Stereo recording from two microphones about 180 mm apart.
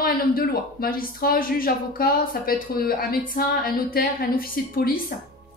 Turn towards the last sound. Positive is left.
turn(degrees=55)  # may be behind; listen again after turning